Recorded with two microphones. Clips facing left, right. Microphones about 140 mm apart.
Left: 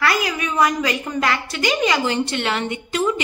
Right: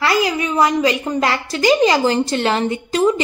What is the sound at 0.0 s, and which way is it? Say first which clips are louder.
A woman's voice: right 4 dB; 25° right (ahead or behind).